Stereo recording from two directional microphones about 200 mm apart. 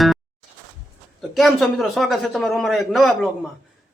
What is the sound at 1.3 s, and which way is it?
A man's voice, centre (ahead or behind).